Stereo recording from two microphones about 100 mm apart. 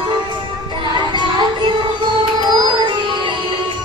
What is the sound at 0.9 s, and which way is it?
Music, 50° right (ahead or behind).